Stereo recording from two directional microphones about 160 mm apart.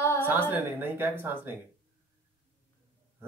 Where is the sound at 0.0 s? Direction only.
15° left (ahead or behind).